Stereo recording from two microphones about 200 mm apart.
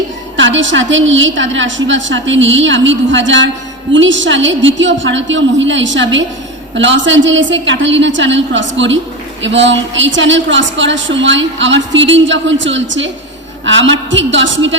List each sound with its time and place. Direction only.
0.3 s a woman's voice: 70° right (ahead or behind)